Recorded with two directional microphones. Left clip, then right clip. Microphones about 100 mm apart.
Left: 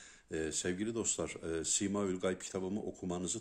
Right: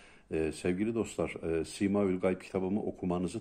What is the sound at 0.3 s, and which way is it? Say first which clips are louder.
Speech: right 5 dB; 25° left (ahead or behind).